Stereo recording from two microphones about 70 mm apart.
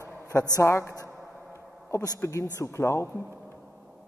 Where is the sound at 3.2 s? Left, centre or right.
Right.